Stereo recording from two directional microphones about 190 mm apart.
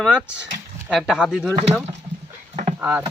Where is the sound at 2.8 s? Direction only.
10° right (ahead or behind).